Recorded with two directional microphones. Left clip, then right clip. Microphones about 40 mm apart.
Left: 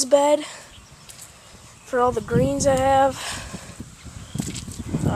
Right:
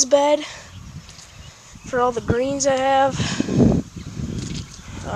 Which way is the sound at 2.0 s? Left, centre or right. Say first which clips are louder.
Even; left.